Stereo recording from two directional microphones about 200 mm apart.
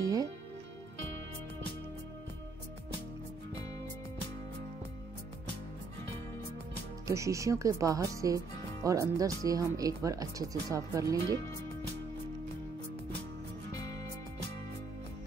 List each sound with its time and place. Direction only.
0.0 s music: 15° right (ahead or behind)
7.1 s speech: 15° right (ahead or behind)